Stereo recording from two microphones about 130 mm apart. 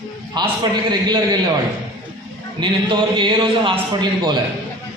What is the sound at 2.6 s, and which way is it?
A man's voice, 40° right (ahead or behind).